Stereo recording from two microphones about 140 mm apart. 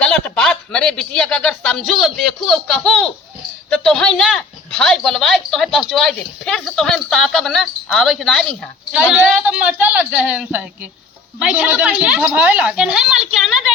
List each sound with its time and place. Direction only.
0.0 s speech: 5° left (ahead or behind)
8.9 s a woman's voice: 10° right (ahead or behind)